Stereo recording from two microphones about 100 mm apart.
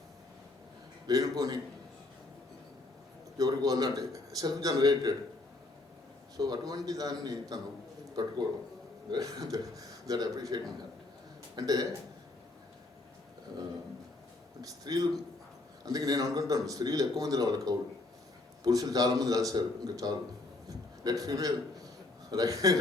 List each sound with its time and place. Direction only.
1.0 s speech: 35° right (ahead or behind)
3.3 s a man's voice: 40° right (ahead or behind)
6.3 s speech: 40° right (ahead or behind)
14.6 s a man's voice: 40° right (ahead or behind)